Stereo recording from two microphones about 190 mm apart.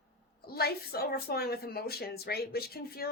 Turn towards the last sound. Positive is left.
turn(degrees=55)  # may be behind; listen again after turning